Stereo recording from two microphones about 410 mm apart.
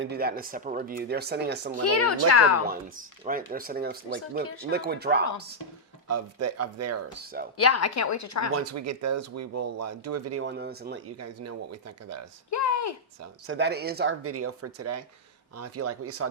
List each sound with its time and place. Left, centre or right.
0.0 s speech: right
1.8 s a woman's voice: left
3.2 s speech: right
4.4 s a woman's voice: left
4.7 s speech: right
6.1 s speech: right
7.5 s a woman's voice: left
8.5 s speech: right
11.2 s speech: right
12.5 s a sound: left
13.5 s speech: right